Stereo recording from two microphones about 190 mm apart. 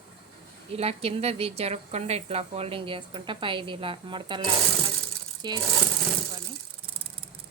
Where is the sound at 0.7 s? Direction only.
30° right (ahead or behind).